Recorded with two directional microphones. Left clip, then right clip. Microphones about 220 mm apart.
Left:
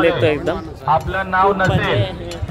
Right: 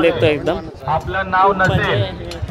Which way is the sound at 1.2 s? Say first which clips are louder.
Right 4 dB; 45° right (ahead or behind).